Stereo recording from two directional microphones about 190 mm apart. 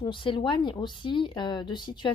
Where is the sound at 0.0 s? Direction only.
25° left (ahead or behind).